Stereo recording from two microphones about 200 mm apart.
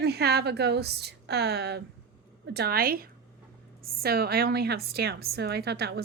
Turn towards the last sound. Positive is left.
turn(degrees=-55)  # may be behind; listen again after turning